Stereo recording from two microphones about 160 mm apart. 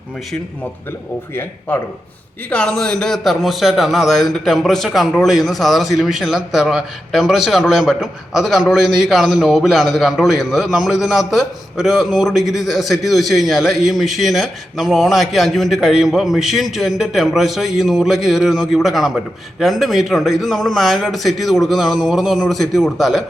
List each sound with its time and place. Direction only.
1.4 s a man's voice: 10° left (ahead or behind)